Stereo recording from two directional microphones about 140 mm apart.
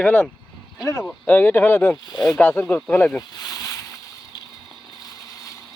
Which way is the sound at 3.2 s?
25° left (ahead or behind).